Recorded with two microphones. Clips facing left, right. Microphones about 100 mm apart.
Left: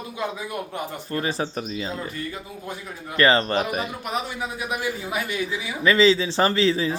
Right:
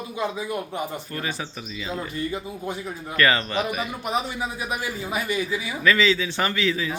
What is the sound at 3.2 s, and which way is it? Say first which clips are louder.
Speech: left 3 dB; 30° left (ahead or behind).